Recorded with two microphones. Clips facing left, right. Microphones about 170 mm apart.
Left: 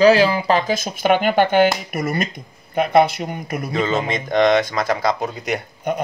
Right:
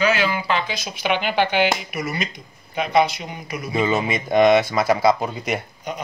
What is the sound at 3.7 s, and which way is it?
Speech, 10° right (ahead or behind).